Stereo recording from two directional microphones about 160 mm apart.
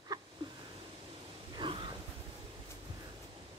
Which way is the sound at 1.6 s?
30° right (ahead or behind).